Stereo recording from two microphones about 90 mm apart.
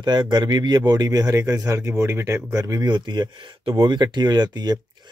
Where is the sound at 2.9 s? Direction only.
55° right (ahead or behind).